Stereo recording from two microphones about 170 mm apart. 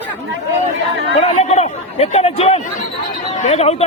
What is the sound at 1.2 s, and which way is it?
A man's voice, 40° left (ahead or behind).